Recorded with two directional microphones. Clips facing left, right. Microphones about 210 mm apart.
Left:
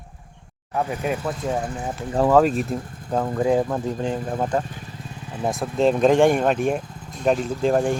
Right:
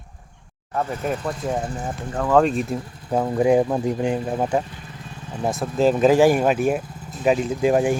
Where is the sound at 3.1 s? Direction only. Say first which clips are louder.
Right 3 dB; 10° right (ahead or behind).